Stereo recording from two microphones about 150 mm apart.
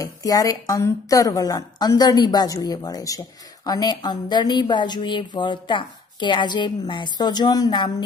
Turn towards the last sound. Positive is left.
turn(degrees=30)  # may be behind; listen again after turning